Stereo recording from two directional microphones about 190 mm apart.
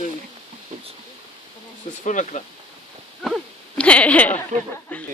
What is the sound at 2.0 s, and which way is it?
Speech, 40° left (ahead or behind).